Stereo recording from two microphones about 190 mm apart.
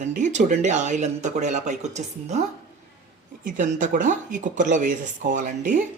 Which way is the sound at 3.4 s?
40° right (ahead or behind).